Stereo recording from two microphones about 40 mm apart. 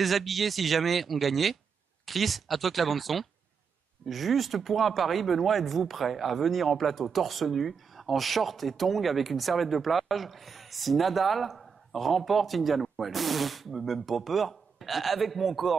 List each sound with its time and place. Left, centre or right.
0.0 s speech: centre